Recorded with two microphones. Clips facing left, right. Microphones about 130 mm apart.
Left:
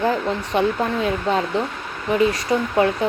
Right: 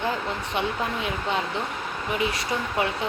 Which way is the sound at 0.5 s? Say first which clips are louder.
Left 8 dB; 35° left (ahead or behind).